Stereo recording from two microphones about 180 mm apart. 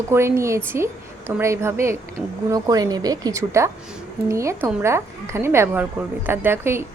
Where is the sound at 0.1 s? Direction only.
15° right (ahead or behind).